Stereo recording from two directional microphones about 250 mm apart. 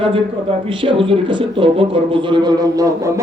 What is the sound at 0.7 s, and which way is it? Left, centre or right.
Speech, centre.